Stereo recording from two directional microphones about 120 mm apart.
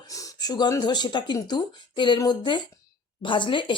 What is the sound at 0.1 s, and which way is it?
A woman's voice, 30° left (ahead or behind).